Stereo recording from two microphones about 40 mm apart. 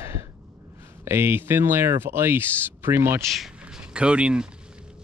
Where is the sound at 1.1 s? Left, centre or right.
Right.